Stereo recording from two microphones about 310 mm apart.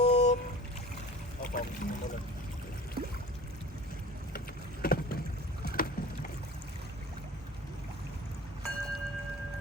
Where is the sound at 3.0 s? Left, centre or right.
Right.